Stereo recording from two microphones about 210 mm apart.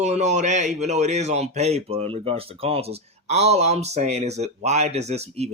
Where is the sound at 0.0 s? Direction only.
35° right (ahead or behind).